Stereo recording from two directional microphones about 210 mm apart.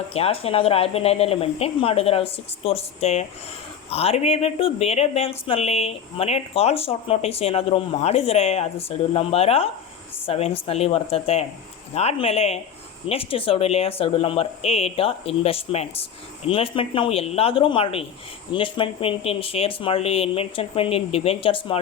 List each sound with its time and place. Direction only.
0.1 s speech: 30° left (ahead or behind)